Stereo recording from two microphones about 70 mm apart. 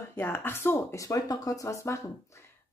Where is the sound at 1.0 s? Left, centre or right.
Left.